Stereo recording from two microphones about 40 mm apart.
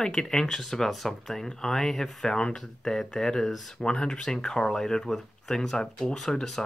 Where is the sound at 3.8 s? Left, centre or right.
Left.